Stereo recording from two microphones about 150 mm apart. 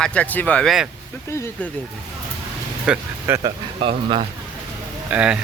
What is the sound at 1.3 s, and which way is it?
Speech, 15° left (ahead or behind).